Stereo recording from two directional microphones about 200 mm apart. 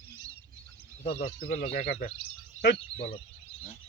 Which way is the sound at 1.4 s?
40° left (ahead or behind).